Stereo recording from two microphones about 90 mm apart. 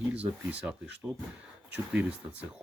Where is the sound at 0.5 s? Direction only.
15° right (ahead or behind).